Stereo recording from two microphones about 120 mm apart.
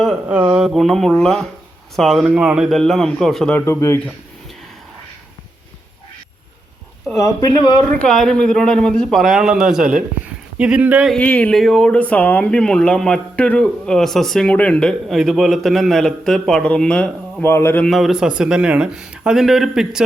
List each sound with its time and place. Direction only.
0.0 s speech: 5° right (ahead or behind)
3.7 s speech: 20° left (ahead or behind)
7.2 s speech: 30° left (ahead or behind)
7.9 s speech: 5° left (ahead or behind); by 11.1 s 10° right (ahead or behind)
11.1 s speech: 10° left (ahead or behind)
17.4 s speech: 20° left (ahead or behind)
17.8 s speech: centre (ahead or behind)